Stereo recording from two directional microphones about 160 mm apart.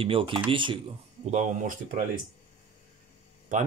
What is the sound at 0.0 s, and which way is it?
Speech, 35° right (ahead or behind).